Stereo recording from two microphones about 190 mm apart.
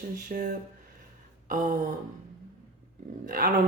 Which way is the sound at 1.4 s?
45° right (ahead or behind).